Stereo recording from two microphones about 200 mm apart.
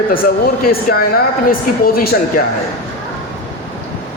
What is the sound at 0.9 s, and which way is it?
A man's voice, 45° left (ahead or behind).